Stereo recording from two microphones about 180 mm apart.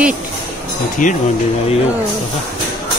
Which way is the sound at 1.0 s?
45° left (ahead or behind).